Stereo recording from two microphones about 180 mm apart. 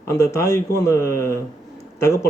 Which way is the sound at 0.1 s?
15° left (ahead or behind).